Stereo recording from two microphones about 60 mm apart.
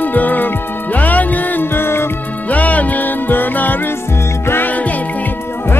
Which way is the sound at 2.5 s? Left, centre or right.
Left.